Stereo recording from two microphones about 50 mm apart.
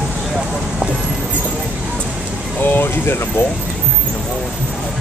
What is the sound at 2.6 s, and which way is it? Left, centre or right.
Speech, left.